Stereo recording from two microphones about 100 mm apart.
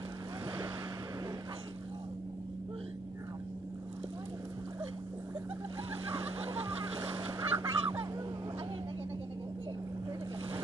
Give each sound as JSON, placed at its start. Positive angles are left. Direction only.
{"t": 6.5, "sound": "boat", "side_deg": -25}
{"t": 7.3, "sound": "fowl", "side_deg": -25}